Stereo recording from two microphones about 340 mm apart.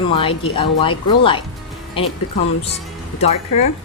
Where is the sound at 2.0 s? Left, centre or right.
Centre.